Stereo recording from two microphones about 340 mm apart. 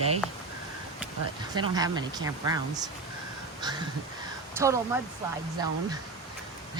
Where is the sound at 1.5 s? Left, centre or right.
Centre.